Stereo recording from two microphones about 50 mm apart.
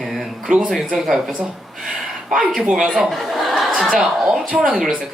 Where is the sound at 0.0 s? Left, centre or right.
Centre.